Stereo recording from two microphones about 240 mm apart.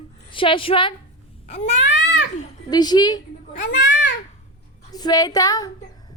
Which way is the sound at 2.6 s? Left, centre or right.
Centre.